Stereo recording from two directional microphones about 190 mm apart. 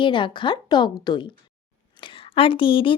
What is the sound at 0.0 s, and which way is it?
Speech, 25° left (ahead or behind).